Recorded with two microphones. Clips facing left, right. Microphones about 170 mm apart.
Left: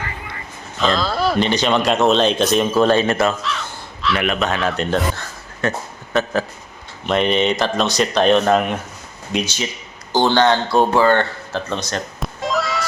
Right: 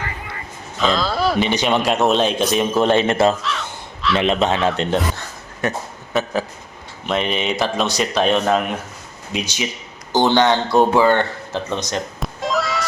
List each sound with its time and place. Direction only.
0.8 s a sound: centre (ahead or behind)
1.5 s a man's voice: 15° right (ahead or behind)
3.4 s crow: centre (ahead or behind)
4.2 s a man's voice: 25° right (ahead or behind)
6.1 s a man's voice: centre (ahead or behind)
12.2 s music: centre (ahead or behind)